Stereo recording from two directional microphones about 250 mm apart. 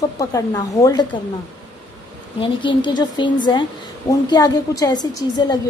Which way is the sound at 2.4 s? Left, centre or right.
Centre.